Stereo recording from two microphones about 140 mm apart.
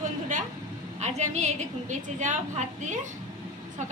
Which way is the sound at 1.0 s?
55° right (ahead or behind).